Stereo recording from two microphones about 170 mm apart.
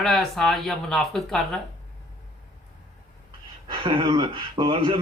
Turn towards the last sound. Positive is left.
turn(degrees=-30)  # may be behind; listen again after turning